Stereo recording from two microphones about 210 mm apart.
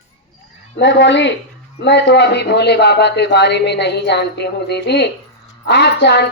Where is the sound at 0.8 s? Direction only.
60° left (ahead or behind).